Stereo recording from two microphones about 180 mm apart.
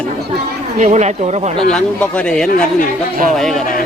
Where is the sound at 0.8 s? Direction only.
40° right (ahead or behind).